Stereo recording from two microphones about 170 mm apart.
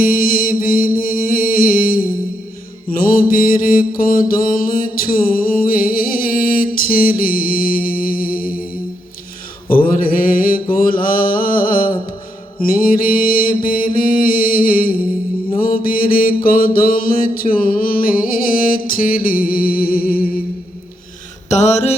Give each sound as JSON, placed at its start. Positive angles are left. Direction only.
{"t": 0.0, "sound": "music", "side_deg": 60}
{"t": 2.9, "sound": "mantra", "side_deg": 55}
{"t": 9.6, "sound": "mantra", "side_deg": 55}
{"t": 18.9, "sound": "music", "side_deg": 55}
{"t": 21.5, "sound": "a sound", "side_deg": 40}